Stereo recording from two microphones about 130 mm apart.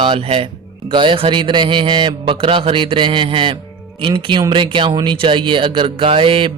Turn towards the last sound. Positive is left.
turn(degrees=-45)  # may be behind; listen again after turning